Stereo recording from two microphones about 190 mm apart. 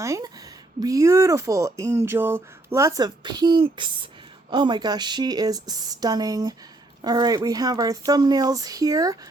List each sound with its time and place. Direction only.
0.0 s speech: 15° right (ahead or behind)